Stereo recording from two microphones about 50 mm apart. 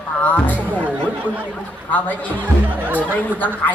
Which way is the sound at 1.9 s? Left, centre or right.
Left.